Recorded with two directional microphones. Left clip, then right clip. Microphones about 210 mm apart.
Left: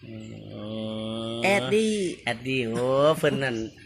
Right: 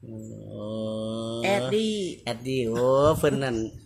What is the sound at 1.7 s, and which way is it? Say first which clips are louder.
Speech: left 2 dB; 40° left (ahead or behind).